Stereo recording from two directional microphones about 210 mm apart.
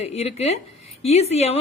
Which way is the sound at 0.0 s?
30° left (ahead or behind).